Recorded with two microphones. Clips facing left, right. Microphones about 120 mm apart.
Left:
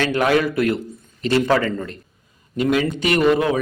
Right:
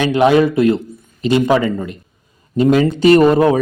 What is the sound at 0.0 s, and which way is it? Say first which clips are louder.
A man's voice: right 6 dB; 20° right (ahead or behind).